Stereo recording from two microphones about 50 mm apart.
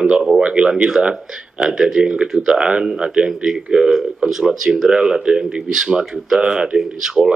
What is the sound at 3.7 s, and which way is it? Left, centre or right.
Speech, centre.